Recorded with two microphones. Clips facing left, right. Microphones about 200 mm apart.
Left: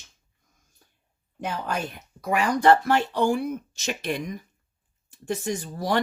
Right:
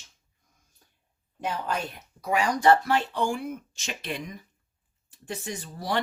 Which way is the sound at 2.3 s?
50° left (ahead or behind).